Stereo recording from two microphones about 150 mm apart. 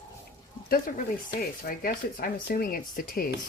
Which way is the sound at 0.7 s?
70° left (ahead or behind).